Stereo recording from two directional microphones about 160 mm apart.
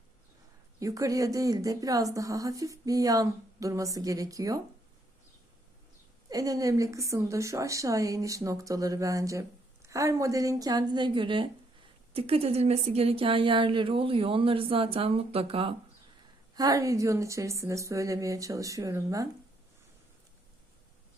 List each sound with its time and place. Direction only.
0.8 s a woman's voice: 20° right (ahead or behind)
6.3 s a woman's voice: 20° right (ahead or behind)
16.6 s a woman's voice: 20° right (ahead or behind)